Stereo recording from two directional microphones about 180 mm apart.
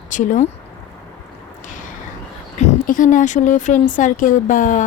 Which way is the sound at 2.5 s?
45° left (ahead or behind).